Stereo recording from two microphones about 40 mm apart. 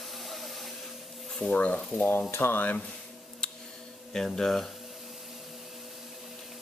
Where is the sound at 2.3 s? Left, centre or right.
Left.